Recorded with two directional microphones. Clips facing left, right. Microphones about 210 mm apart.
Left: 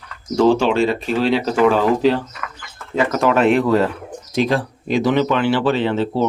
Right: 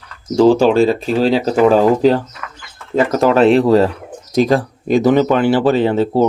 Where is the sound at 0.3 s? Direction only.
35° right (ahead or behind).